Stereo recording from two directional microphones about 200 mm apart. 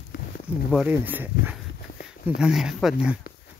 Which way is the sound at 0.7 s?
10° right (ahead or behind).